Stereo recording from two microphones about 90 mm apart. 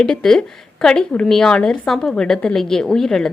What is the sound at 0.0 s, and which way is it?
A woman's voice, 5° left (ahead or behind).